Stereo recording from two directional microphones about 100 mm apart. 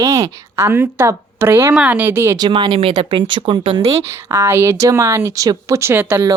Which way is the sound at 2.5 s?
55° right (ahead or behind).